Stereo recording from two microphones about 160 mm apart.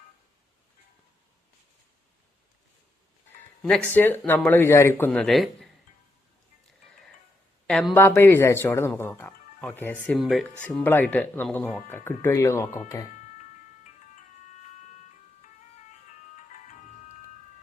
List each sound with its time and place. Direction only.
3.8 s speech: 10° left (ahead or behind)
7.7 s speech: 5° left (ahead or behind)
7.9 s speech: 15° left (ahead or behind)
10.2 s speech: centre (ahead or behind); by 12.8 s 15° left (ahead or behind)